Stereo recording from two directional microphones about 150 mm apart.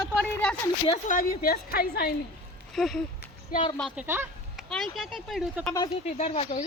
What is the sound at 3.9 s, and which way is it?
Speech, 15° right (ahead or behind).